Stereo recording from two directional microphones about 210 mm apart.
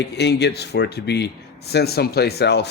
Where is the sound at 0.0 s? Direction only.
55° left (ahead or behind).